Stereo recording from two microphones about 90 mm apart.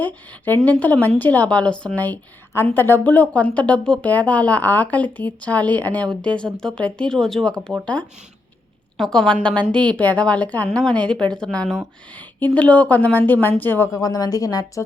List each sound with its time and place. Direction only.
0.0 s speech: 20° left (ahead or behind)
9.0 s speech: 5° left (ahead or behind); by 13.9 s 25° left (ahead or behind)
13.9 s a woman's voice: 45° left (ahead or behind)